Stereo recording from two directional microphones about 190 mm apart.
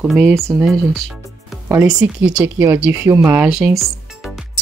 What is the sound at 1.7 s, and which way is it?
Speech, 20° right (ahead or behind).